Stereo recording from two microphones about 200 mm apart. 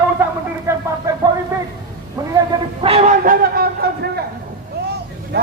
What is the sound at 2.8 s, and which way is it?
Speech, 35° right (ahead or behind).